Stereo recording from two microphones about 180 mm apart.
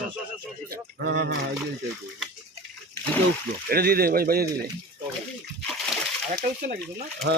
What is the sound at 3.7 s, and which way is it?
Speech, 60° right (ahead or behind).